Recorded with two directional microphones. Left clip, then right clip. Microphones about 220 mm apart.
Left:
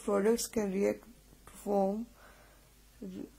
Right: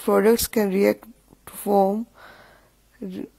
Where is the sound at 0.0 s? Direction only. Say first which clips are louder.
Right 11 dB; 35° right (ahead or behind).